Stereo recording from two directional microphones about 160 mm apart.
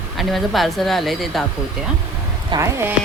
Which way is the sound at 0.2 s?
Centre (ahead or behind).